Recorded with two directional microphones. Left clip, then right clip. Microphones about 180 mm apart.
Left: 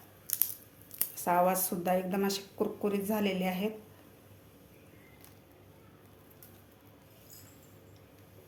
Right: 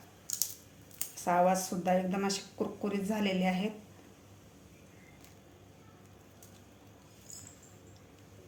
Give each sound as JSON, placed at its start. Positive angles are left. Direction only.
{"t": 0.9, "sound": "speech", "side_deg": 20}